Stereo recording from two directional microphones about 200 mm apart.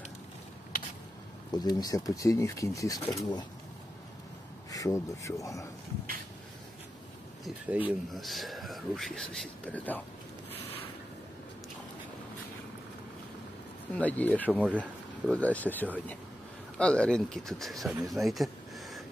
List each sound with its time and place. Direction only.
1.5 s speech: 20° left (ahead or behind)
4.6 s speech: 15° left (ahead or behind)
7.4 s speech: 5° right (ahead or behind)
13.9 s speech: 10° left (ahead or behind)